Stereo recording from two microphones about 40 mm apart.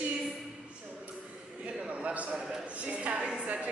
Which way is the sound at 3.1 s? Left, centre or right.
Centre.